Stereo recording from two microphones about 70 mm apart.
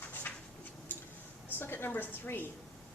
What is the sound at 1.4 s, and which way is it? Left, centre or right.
A woman's voice, left.